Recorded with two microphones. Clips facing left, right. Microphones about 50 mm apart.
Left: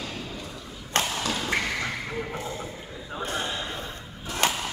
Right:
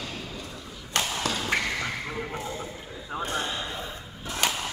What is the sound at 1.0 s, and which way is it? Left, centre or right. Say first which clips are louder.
Thump: left 2 dB; left.